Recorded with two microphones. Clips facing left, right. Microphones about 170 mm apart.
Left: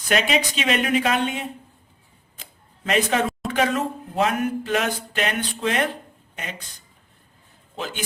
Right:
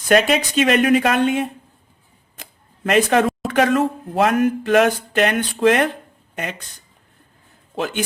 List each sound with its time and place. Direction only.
0.1 s speech: 50° right (ahead or behind)
2.4 s camera: 55° right (ahead or behind)
3.4 s speech: 55° right (ahead or behind)